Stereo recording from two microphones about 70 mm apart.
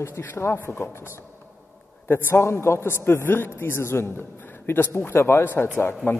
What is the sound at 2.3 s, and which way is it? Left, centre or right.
A man's voice, left.